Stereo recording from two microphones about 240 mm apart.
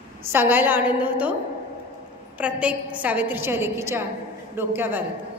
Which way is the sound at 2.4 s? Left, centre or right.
Centre.